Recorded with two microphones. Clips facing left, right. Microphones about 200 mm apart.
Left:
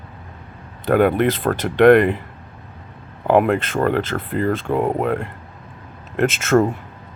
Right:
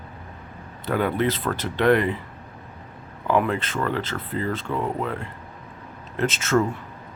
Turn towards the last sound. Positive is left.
turn(degrees=55)  # may be behind; listen again after turning